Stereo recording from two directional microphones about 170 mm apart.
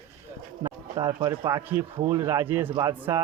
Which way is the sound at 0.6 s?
25° right (ahead or behind).